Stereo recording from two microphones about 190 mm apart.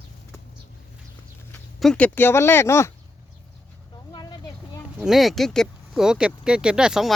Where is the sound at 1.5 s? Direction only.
5° left (ahead or behind).